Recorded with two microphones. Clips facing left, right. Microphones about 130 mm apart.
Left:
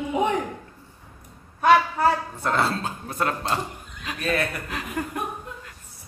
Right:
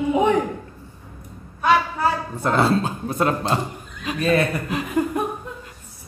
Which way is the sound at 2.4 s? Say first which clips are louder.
Right 5 dB; 15° right (ahead or behind).